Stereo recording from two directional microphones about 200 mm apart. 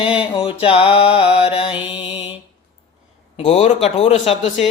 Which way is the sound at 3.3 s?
30° left (ahead or behind).